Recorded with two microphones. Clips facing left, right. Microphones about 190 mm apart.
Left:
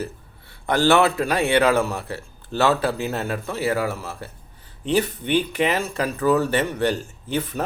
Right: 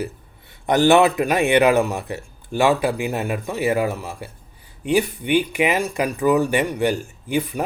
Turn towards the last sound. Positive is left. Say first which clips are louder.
# right 3 dB
turn(degrees=-15)  # may be behind; listen again after turning